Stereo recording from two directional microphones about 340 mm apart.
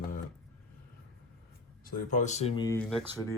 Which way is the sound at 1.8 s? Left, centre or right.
Left.